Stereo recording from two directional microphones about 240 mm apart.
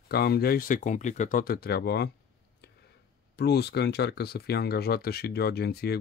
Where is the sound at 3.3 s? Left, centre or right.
Left.